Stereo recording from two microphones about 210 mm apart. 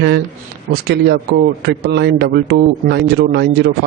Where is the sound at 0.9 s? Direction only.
50° right (ahead or behind).